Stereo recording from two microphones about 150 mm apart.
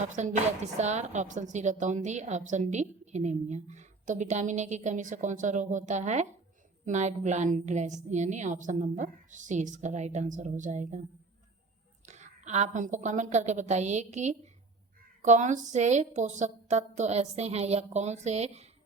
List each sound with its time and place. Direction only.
0.0 s a woman's voice: 50° right (ahead or behind)
12.0 s a woman's voice: 50° right (ahead or behind)